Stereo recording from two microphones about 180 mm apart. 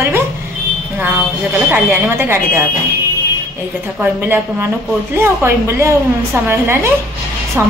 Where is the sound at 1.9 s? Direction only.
15° right (ahead or behind).